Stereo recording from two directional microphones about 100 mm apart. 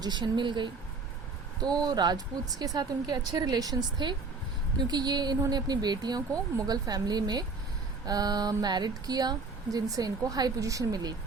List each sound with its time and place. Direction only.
0.0 s speech: 45° right (ahead or behind)